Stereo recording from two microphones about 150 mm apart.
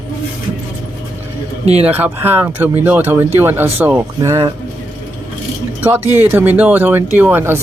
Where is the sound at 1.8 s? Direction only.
10° right (ahead or behind).